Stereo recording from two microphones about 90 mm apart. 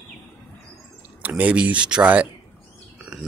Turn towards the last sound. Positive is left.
turn(degrees=-5)  # may be behind; listen again after turning